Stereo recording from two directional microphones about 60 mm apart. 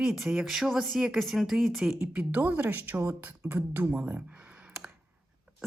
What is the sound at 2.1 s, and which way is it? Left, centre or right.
Speech, right.